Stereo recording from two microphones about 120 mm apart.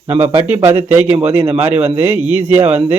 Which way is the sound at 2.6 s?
65° right (ahead or behind).